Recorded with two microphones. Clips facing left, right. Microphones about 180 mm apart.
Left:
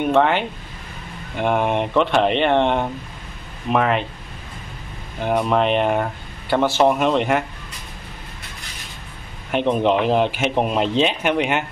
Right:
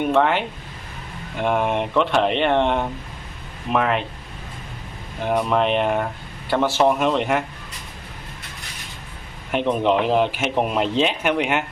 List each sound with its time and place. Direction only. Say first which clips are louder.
0.0 s speech: left 1 dB; centre (ahead or behind)
5.2 s speech: left 1 dB; centre (ahead or behind)
9.5 s speech: left 1 dB; centre (ahead or behind)